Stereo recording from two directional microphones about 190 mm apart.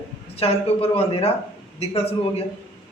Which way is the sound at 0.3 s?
30° left (ahead or behind).